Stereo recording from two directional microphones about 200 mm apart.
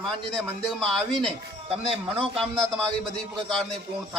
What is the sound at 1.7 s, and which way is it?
Speech, 30° right (ahead or behind).